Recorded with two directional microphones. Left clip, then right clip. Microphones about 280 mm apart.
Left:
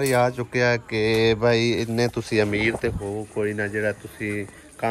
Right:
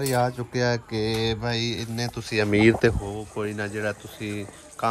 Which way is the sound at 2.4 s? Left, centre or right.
Right.